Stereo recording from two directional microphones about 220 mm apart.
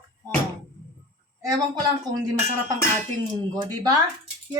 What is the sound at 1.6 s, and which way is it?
Speech, 20° right (ahead or behind).